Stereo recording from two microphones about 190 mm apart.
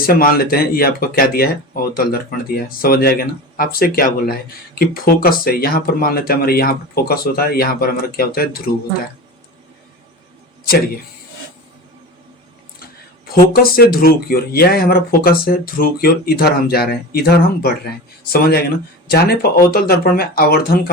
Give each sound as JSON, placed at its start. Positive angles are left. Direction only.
{"t": 0.0, "sound": "speech", "side_deg": 50}
{"t": 13.3, "sound": "speech", "side_deg": 50}